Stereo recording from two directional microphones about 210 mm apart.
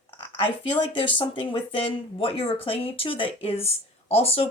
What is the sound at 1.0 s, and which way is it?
Speech, 25° left (ahead or behind).